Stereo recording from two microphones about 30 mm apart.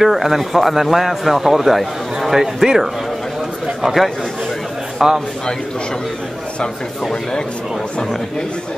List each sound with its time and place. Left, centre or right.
0.0 s speech: centre
3.8 s a man's voice: centre